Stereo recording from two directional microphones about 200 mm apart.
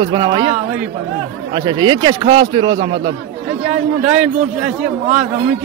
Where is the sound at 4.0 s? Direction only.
5° right (ahead or behind).